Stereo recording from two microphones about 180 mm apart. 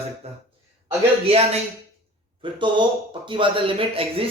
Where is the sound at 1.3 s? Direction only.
30° right (ahead or behind).